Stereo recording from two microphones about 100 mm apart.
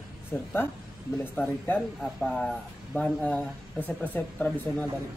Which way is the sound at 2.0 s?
5° left (ahead or behind).